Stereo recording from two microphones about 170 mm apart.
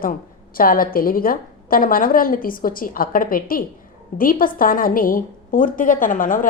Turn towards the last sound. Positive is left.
turn(degrees=50)  # may be behind; listen again after turning